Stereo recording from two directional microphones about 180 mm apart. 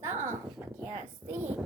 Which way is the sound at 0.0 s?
15° right (ahead or behind).